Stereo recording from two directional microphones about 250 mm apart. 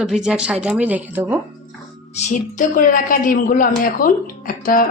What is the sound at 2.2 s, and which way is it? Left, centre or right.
A woman's voice, left.